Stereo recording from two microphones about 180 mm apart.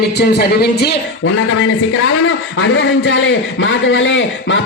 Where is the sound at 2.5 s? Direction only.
90° left.